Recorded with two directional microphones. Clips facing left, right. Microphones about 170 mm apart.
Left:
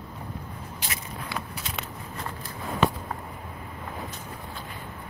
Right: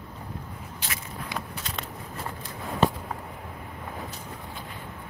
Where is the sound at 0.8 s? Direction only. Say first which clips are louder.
Even; 15° left (ahead or behind).